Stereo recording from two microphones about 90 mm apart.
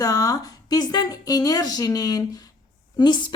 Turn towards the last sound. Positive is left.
turn(degrees=60)  # may be behind; listen again after turning